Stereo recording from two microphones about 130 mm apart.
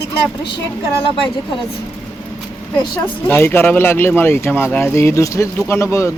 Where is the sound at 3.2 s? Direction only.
15° left (ahead or behind).